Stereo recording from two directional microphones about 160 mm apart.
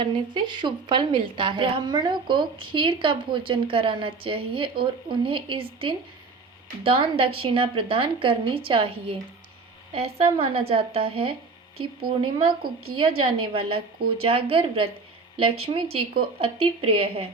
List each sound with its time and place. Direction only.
0.0 s a woman's voice: 30° right (ahead or behind)